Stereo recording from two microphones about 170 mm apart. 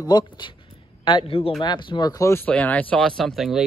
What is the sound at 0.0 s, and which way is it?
A man's voice, 25° left (ahead or behind).